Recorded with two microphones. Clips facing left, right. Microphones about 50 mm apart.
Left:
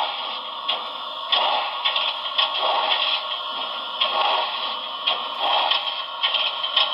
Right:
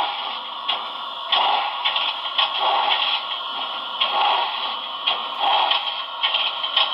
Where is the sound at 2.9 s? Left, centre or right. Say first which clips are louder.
Right 1 dB; centre.